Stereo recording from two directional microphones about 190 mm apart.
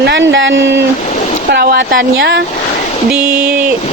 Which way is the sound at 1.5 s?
60° right (ahead or behind).